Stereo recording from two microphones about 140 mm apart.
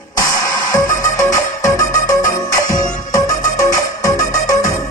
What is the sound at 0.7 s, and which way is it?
Music, 25° left (ahead or behind).